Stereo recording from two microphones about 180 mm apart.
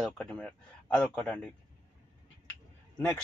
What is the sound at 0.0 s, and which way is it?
Speech, 5° left (ahead or behind).